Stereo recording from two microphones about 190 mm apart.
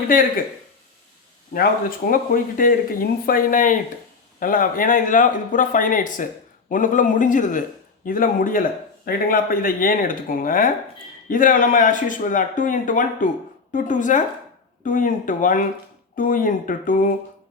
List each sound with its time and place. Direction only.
1.5 s speech: 50° left (ahead or behind)